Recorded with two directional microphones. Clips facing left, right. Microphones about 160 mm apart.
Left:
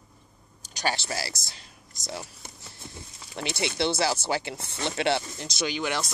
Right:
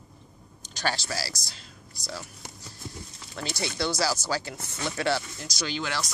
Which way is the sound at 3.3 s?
20° left (ahead or behind).